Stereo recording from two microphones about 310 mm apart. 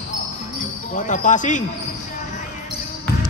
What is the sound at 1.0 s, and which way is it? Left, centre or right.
Speech, left.